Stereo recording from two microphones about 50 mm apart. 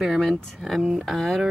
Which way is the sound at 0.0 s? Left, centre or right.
Centre.